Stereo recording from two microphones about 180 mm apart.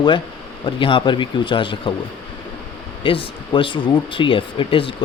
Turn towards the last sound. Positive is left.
turn(degrees=30)  # may be behind; listen again after turning